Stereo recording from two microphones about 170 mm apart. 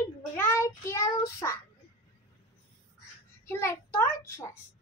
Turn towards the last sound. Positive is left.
turn(degrees=15)  # may be behind; listen again after turning